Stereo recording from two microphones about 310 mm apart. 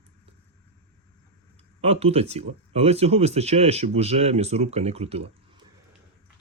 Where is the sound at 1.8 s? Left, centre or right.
Centre.